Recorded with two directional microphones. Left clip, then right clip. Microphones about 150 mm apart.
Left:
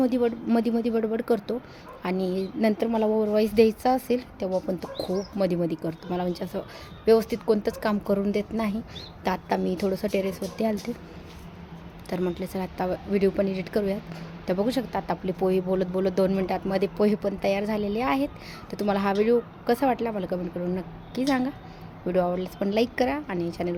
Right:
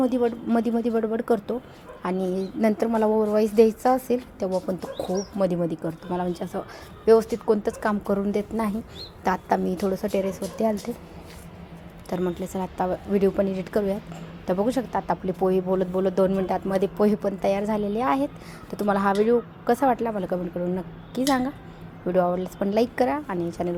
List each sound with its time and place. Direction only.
0.0 s speech: 10° right (ahead or behind)
12.0 s speech: 10° right (ahead or behind)